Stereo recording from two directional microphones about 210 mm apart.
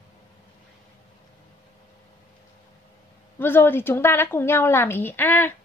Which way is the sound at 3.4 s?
10° left (ahead or behind).